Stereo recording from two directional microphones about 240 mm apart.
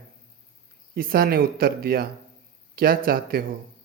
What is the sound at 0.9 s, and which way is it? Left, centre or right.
Speech, right.